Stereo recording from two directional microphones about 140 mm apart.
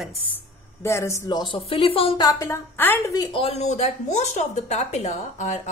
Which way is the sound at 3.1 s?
30° left (ahead or behind).